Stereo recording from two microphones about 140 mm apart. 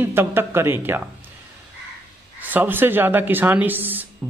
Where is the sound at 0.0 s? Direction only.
15° right (ahead or behind).